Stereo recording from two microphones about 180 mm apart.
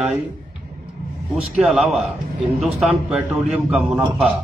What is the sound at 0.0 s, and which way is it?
Speech, centre (ahead or behind).